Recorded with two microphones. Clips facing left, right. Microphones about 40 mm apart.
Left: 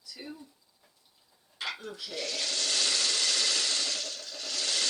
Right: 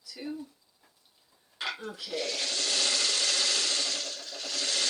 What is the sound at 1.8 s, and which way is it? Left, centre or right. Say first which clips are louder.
Rub: right 3 dB; right.